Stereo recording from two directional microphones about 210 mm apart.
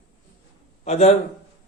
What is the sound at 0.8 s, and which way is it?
Speech, 30° left (ahead or behind).